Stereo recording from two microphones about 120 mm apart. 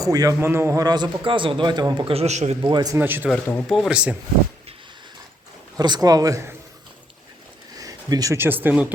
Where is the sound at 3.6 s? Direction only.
Centre (ahead or behind).